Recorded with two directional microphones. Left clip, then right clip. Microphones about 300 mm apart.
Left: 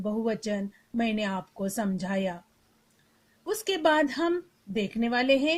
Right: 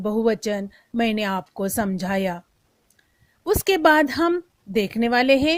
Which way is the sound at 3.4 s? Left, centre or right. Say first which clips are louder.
Right 8 dB; right.